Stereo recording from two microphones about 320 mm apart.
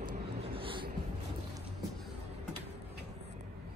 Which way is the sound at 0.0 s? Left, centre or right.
Right.